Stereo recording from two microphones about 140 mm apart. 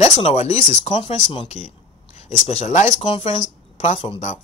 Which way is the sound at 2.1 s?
55° left (ahead or behind).